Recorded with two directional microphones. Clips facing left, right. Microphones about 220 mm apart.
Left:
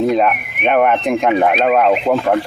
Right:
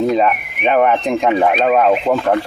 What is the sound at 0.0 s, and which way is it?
Speech, centre (ahead or behind).